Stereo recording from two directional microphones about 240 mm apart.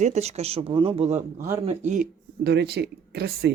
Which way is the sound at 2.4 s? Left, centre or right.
Right.